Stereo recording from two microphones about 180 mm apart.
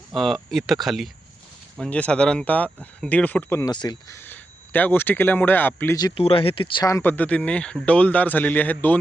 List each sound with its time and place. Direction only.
0.1 s a man's voice: centre (ahead or behind); by 4.2 s 20° left (ahead or behind)
4.3 s a man's voice: 10° left (ahead or behind)